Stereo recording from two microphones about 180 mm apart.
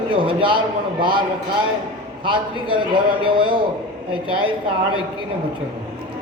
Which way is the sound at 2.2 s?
30° right (ahead or behind).